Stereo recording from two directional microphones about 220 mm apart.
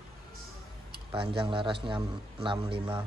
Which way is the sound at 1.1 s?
20° right (ahead or behind).